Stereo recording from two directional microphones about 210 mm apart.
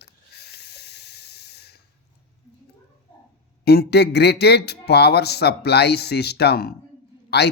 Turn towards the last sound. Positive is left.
turn(degrees=50)  # may be behind; listen again after turning